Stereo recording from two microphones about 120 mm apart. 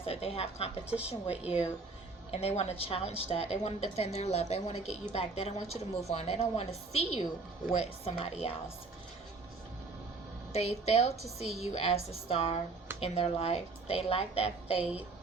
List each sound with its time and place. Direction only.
0.0 s a woman's voice: 55° left (ahead or behind)
0.9 s a woman's voice: 10° right (ahead or behind)
1.5 s a woman's voice: 60° left (ahead or behind)
10.5 s a woman's voice: 60° left (ahead or behind)